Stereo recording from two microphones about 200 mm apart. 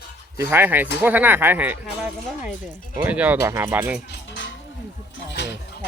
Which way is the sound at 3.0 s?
10° right (ahead or behind).